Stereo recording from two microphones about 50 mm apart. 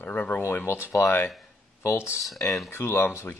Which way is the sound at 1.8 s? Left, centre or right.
Left.